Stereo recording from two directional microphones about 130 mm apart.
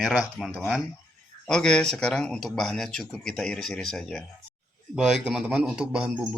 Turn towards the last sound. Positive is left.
turn(degrees=-10)  # may be behind; listen again after turning